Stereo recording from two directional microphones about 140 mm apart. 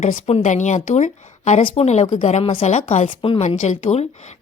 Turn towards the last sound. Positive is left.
turn(degrees=55)  # may be behind; listen again after turning